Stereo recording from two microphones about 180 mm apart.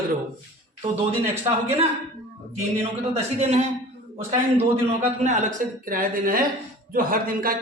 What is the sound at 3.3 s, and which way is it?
Speech, 40° right (ahead or behind).